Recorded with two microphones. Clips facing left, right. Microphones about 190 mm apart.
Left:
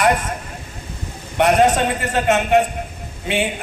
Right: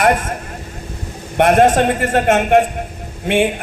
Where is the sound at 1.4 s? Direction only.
50° right (ahead or behind).